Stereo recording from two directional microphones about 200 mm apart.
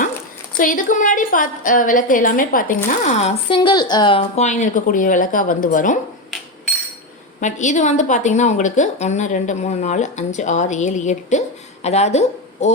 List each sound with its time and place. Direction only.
0.6 s a woman's voice: 40° left (ahead or behind)
3.5 s a woman's voice: 25° left (ahead or behind); by 6.0 s 40° left (ahead or behind)
7.4 s a woman's voice: 40° left (ahead or behind)